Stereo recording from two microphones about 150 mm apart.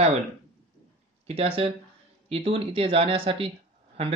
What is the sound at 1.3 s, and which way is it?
Speech, 40° right (ahead or behind).